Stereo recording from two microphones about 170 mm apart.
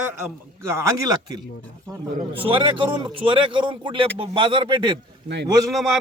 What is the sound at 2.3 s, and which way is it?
Speech, 30° right (ahead or behind).